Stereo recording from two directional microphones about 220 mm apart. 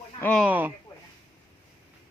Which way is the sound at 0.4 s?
10° right (ahead or behind).